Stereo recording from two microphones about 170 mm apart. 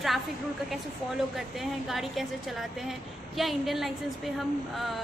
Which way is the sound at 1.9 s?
Centre (ahead or behind).